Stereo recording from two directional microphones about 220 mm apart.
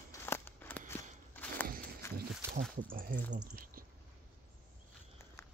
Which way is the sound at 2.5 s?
45° right (ahead or behind).